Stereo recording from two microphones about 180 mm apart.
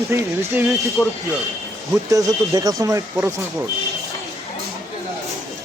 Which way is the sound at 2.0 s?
20° right (ahead or behind).